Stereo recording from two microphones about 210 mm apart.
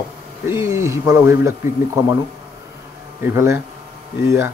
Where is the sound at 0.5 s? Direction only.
15° right (ahead or behind).